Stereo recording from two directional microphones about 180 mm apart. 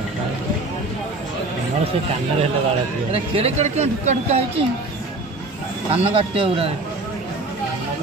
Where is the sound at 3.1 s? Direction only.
35° right (ahead or behind).